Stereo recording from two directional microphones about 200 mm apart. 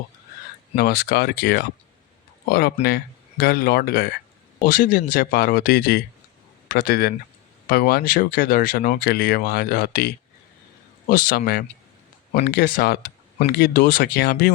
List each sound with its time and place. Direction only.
0.8 s speech: 50° left (ahead or behind)